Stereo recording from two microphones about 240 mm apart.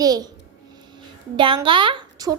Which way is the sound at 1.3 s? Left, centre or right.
Right.